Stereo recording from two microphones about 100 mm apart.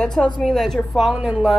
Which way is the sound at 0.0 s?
10° left (ahead or behind).